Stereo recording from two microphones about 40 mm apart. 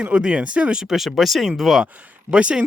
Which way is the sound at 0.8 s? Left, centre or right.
Centre.